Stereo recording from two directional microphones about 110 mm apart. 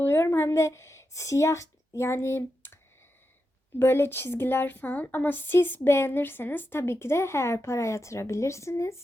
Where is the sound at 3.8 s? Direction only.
20° left (ahead or behind).